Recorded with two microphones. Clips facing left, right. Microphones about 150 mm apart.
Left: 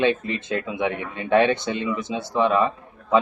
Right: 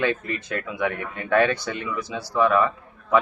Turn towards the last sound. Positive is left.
turn(degrees=20)  # may be behind; listen again after turning